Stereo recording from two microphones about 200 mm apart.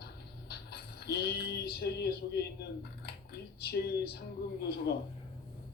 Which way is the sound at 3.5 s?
50° left (ahead or behind).